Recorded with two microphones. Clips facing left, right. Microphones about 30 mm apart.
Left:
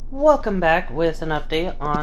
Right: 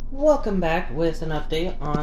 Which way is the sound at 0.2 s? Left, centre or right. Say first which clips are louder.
Left 3 dB; left.